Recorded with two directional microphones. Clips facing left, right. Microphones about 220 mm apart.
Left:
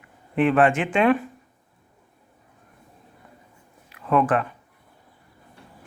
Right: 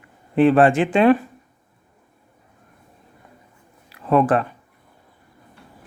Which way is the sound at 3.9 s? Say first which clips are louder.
Right 4 dB; 35° right (ahead or behind).